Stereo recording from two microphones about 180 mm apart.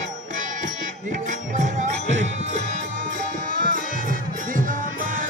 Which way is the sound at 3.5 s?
50° right (ahead or behind).